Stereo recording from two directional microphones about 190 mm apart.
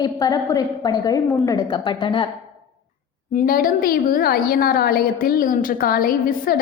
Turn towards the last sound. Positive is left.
turn(degrees=50)  # may be behind; listen again after turning